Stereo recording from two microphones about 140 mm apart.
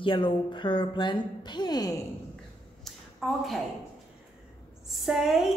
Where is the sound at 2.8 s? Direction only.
Centre (ahead or behind).